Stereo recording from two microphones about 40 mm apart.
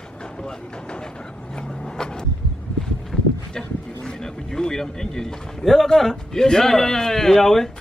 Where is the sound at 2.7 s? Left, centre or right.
Centre.